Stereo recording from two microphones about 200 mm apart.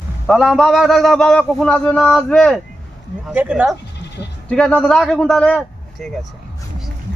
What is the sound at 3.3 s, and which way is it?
A man's voice, 5° right (ahead or behind).